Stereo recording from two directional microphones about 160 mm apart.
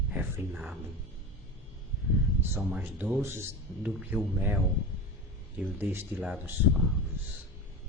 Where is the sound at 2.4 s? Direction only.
15° right (ahead or behind).